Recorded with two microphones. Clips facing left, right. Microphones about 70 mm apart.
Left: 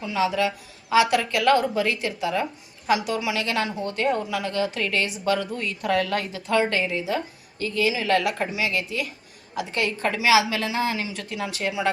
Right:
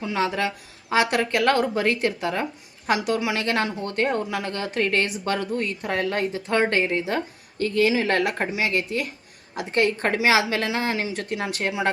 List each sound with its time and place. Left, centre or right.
0.0 s a woman's voice: right
5.8 s a woman's voice: right